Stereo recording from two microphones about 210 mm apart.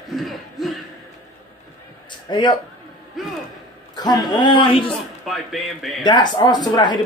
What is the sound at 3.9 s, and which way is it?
Speech, 20° left (ahead or behind).